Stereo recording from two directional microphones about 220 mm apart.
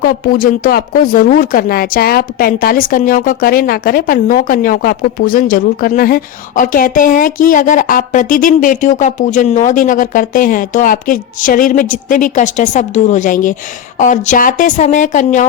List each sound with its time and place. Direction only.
0.0 s speech: 40° left (ahead or behind)